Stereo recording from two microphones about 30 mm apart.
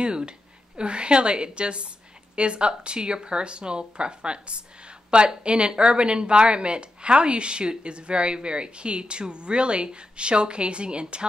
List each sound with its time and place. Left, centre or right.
0.0 s a woman's voice: right